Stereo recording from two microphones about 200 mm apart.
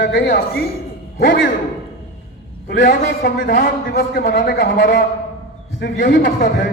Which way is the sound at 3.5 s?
50° left (ahead or behind).